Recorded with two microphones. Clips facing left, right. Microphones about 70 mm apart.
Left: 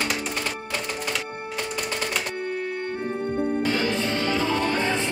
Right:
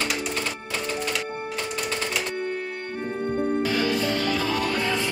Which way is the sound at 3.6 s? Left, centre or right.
Left.